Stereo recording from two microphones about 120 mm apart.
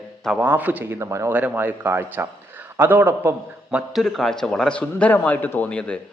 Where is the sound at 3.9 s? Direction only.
Centre (ahead or behind).